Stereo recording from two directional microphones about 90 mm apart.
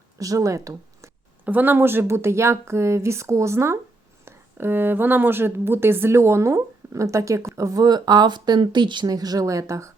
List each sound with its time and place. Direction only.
0.2 s speech: 40° right (ahead or behind)
1.5 s a woman's voice: 20° right (ahead or behind)